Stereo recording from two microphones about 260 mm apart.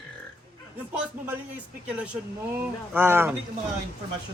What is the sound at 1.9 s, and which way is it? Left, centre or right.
Speech, centre.